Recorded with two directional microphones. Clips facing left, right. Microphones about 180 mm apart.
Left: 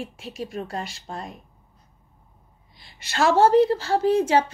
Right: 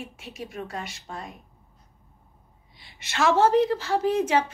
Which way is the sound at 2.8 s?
35° left (ahead or behind).